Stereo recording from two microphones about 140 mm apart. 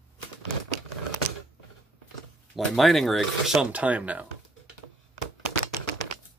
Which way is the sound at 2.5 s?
Centre (ahead or behind).